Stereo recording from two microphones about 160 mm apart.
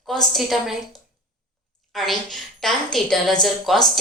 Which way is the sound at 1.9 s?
Centre (ahead or behind).